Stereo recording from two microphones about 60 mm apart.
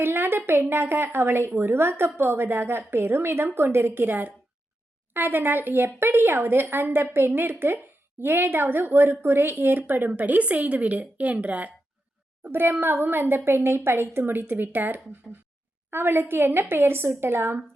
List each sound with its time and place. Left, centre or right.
0.0 s a woman's voice: right
12.4 s a woman's voice: right
15.3 s a sound: centre
15.9 s a woman's voice: right